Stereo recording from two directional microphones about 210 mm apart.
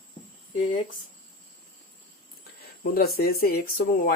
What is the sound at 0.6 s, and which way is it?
Speech, 40° left (ahead or behind).